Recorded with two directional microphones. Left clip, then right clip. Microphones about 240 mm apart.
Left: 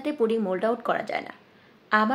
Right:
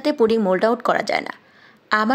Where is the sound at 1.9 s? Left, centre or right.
Right.